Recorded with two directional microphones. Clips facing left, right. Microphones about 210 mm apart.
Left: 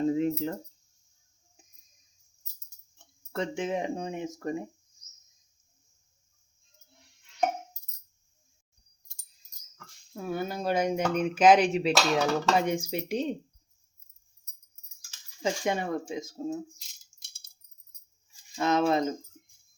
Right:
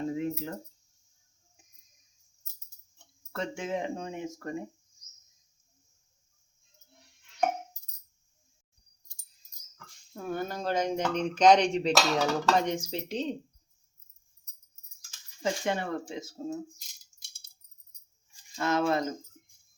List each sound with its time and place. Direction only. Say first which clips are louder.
0.1 s cricket: left 5 dB; 25° left (ahead or behind)
3.3 s speech: left 3 dB; 20° left (ahead or behind)
9.7 s speech: left 2 dB; 5° left (ahead or behind)
15.4 s speech: left 1 dB; 15° left (ahead or behind)
18.5 s speech: left 2 dB; 20° left (ahead or behind)